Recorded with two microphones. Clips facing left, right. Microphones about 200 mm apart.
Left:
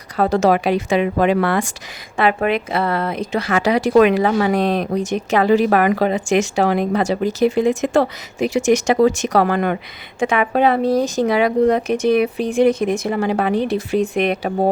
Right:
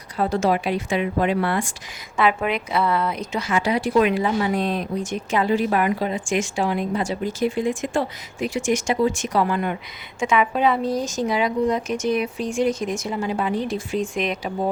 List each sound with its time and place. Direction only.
0.2 s a woman's voice: 75° left (ahead or behind)
2.1 s a woman's voice: 55° left (ahead or behind); by 9.7 s 80° left
10.2 s speech: 55° left (ahead or behind)